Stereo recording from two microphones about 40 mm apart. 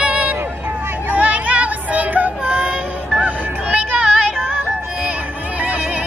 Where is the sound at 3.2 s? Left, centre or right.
Right.